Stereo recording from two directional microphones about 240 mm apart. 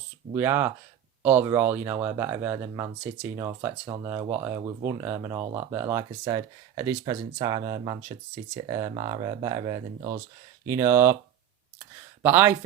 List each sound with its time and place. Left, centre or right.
0.3 s speech: centre
12.2 s speech: centre